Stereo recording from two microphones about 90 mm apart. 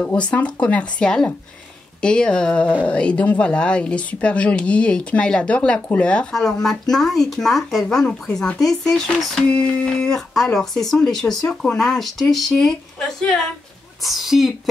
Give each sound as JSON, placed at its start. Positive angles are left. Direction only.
{"t": 0.0, "sound": "speech", "side_deg": 10}
{"t": 14.0, "sound": "speech", "side_deg": -5}